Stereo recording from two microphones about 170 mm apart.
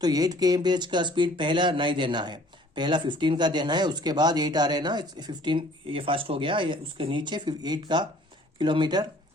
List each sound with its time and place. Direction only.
0.0 s speech: 20° right (ahead or behind)